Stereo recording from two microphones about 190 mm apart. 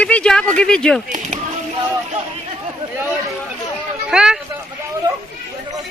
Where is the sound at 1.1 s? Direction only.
45° right (ahead or behind).